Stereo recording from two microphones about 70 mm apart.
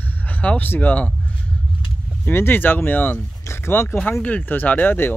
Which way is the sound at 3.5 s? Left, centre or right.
Left.